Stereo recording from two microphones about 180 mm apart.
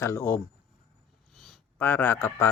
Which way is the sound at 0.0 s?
15° left (ahead or behind).